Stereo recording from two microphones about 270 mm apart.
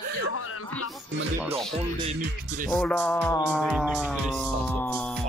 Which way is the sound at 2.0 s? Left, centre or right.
Right.